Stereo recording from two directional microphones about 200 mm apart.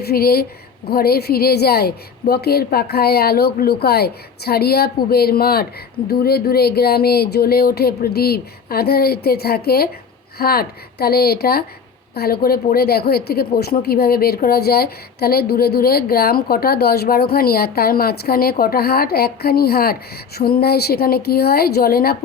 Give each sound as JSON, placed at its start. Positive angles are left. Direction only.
{"t": 0.0, "sound": "a woman's voice", "side_deg": 50}